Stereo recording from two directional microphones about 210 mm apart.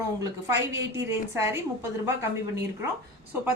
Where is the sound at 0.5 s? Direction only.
55° right (ahead or behind).